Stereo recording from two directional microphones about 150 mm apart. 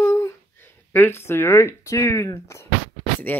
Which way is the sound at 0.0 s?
15° left (ahead or behind).